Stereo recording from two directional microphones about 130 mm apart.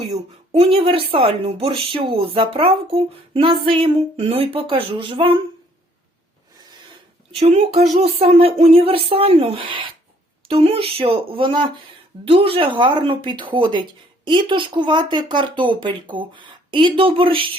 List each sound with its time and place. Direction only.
0.5 s a woman's voice: 45° right (ahead or behind)
7.3 s a woman's voice: 55° right (ahead or behind)